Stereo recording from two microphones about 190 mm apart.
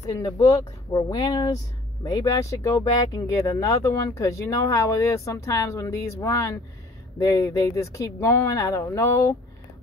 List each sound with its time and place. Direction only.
0.0 s speech: 20° left (ahead or behind)